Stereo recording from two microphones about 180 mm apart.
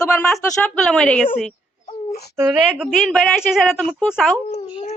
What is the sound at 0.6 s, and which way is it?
Speech, 5° left (ahead or behind).